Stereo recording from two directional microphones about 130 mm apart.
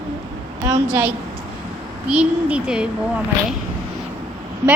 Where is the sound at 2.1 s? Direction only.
10° right (ahead or behind).